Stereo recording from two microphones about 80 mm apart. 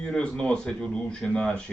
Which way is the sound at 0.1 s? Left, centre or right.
Centre.